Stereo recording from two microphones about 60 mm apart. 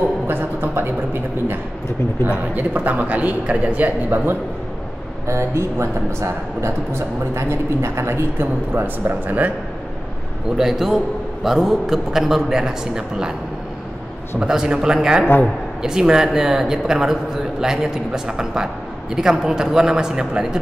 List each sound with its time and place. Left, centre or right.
0.3 s a sound: right
2.2 s a man's voice: right
5.2 s speech: right
10.6 s a man's voice: centre
14.4 s speech: centre